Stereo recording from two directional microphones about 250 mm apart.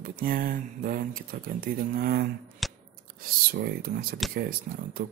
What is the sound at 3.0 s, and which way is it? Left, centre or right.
Speech, right.